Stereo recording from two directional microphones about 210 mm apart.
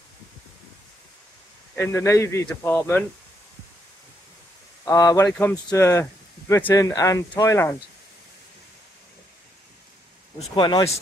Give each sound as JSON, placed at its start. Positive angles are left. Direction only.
{"t": 1.8, "sound": "speech", "side_deg": 10}
{"t": 4.8, "sound": "speech", "side_deg": 15}
{"t": 10.5, "sound": "speech", "side_deg": 20}